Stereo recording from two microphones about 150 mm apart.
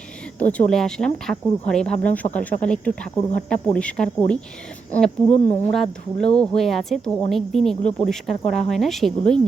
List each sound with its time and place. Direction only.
0.3 s speech: 10° left (ahead or behind)